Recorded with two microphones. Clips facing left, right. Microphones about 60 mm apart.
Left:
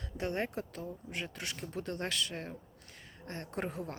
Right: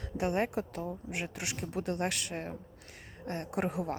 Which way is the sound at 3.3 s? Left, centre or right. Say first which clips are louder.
Right 5 dB; centre.